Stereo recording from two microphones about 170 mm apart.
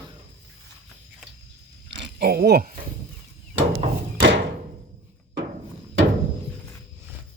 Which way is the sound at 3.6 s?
90° right.